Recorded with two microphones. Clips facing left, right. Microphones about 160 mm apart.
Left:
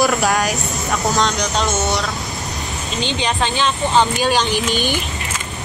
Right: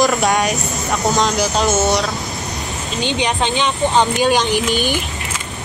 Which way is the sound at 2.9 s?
15° right (ahead or behind).